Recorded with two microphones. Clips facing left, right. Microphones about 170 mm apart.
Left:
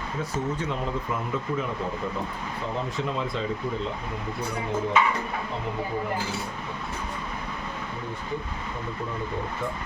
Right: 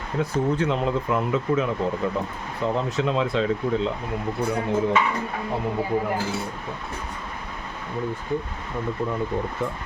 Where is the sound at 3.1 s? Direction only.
90° right.